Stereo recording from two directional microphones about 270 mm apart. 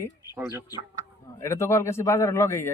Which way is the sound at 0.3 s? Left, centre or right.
Centre.